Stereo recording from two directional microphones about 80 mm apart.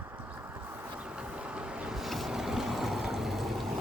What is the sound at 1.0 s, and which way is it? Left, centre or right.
Vehicle, centre.